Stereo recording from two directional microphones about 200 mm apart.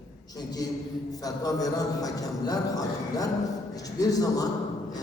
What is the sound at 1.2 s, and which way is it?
A man's voice, 20° left (ahead or behind).